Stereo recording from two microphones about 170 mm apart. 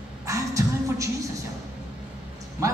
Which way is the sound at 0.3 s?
20° right (ahead or behind).